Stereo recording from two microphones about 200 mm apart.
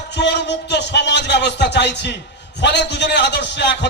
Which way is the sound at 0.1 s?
60° left (ahead or behind).